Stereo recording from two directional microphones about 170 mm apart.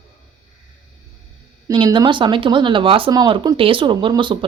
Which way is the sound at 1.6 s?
25° right (ahead or behind).